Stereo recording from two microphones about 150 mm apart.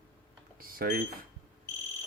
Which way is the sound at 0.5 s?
80° right.